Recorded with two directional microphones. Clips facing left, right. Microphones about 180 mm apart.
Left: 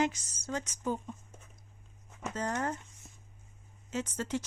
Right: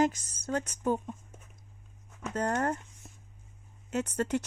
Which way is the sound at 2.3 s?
55° right (ahead or behind).